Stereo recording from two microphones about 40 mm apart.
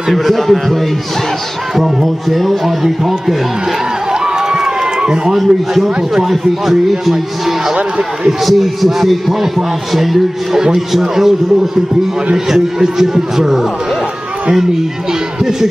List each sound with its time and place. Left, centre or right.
0.1 s a man's voice: centre
1.8 s a man's voice: centre
5.0 s a man's voice: centre
5.3 s a man's voice: centre
8.3 s a man's voice: centre
12.4 s a man's voice: centre